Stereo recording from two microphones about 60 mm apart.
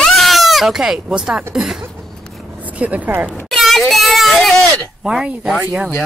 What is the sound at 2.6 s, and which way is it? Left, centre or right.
Speech, right.